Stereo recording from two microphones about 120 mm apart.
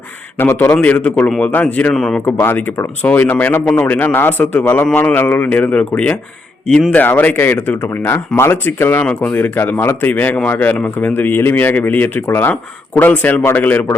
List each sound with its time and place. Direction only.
0.3 s speech: 15° left (ahead or behind)
2.2 s speech: 15° left (ahead or behind)